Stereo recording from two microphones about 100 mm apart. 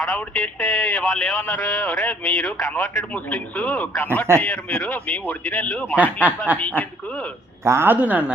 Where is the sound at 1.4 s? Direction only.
25° left (ahead or behind).